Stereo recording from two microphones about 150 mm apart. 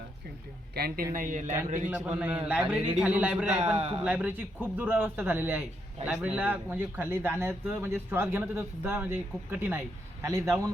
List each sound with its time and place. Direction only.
0.8 s speech: 85° right
1.1 s speech: 60° right (ahead or behind)
1.9 s speech: 10° right (ahead or behind)
3.8 s speech: 40° right (ahead or behind)
4.0 s a man's voice: 10° right (ahead or behind)